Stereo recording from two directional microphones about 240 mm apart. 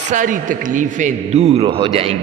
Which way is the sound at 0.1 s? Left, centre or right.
Right.